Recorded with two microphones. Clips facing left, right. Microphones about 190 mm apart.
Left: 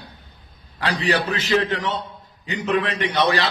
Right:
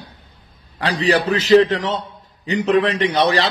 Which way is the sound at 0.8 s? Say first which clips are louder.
Right 4 dB; 35° right (ahead or behind).